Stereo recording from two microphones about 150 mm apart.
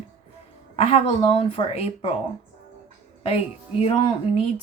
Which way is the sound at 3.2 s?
40° left (ahead or behind).